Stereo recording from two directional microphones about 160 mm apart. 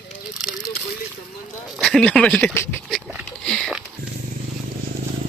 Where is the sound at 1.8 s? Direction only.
Centre (ahead or behind).